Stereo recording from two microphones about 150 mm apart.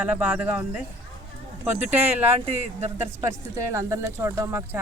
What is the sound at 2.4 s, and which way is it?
Speech, 45° right (ahead or behind).